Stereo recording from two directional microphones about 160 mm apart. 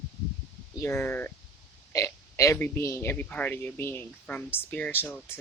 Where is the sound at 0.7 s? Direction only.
20° left (ahead or behind).